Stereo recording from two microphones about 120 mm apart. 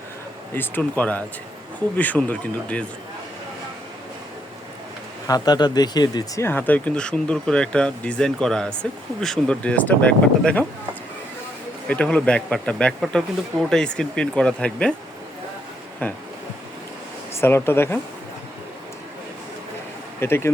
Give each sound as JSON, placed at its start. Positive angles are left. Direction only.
{"t": 0.5, "sound": "speech", "side_deg": 15}
{"t": 5.3, "sound": "speech", "side_deg": 35}
{"t": 6.4, "sound": "speech", "side_deg": 15}
{"t": 11.9, "sound": "speech", "side_deg": 10}
{"t": 17.4, "sound": "speech", "side_deg": 20}
{"t": 20.1, "sound": "speech", "side_deg": 20}